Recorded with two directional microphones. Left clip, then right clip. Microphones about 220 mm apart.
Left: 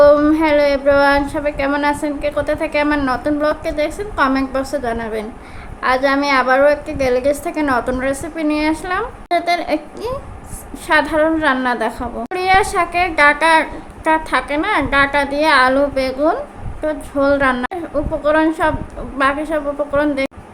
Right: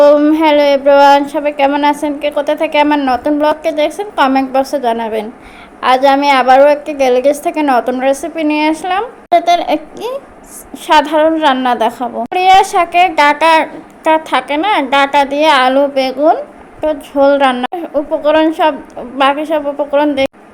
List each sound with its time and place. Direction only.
0.0 s a woman's voice: 15° right (ahead or behind)